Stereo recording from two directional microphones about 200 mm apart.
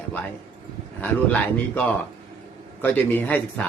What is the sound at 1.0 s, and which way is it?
Speech, 10° left (ahead or behind).